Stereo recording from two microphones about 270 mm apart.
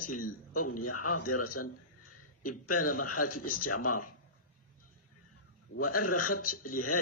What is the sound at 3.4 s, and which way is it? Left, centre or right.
Speech, left.